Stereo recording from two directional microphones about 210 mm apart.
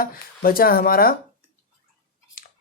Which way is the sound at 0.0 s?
45° left (ahead or behind).